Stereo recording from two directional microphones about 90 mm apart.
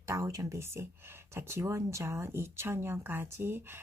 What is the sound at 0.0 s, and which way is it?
Speech, 35° right (ahead or behind).